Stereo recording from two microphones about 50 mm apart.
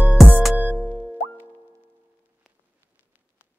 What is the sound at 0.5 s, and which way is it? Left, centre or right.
Music, right.